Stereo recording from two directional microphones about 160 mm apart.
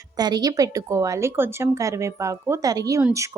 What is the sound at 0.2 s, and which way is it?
A woman's voice, 25° right (ahead or behind).